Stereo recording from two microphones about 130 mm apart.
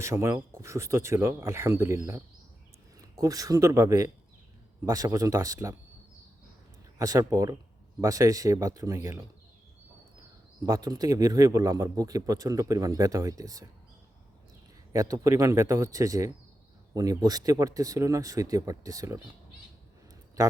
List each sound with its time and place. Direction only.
0.0 s a man's voice: 20° right (ahead or behind)
3.0 s a man's voice: 25° right (ahead or behind)
7.0 s a man's voice: 25° right (ahead or behind)
10.6 s a man's voice: 30° right (ahead or behind)
14.9 s a man's voice: 25° right (ahead or behind)